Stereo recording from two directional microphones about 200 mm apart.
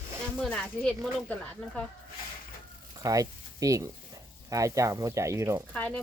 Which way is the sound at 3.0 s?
15° right (ahead or behind).